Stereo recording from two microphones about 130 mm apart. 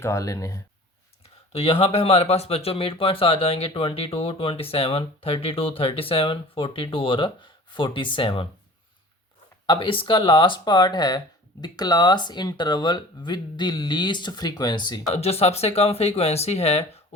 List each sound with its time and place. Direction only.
0.0 s speech: 25° left (ahead or behind)
1.5 s speech: 50° left (ahead or behind)
9.6 s speech: 40° left (ahead or behind)
15.1 s speech: 50° left (ahead or behind)